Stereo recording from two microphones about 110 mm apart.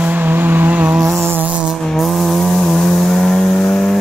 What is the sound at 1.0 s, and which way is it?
Music, centre (ahead or behind).